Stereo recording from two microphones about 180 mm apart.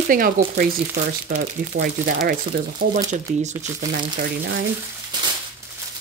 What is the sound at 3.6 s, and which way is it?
Speech, 45° right (ahead or behind).